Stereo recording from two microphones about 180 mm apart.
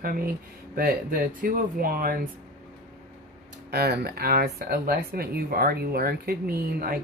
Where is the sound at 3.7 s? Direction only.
65° right (ahead or behind).